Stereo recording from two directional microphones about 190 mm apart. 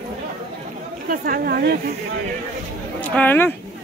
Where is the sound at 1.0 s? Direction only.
50° right (ahead or behind).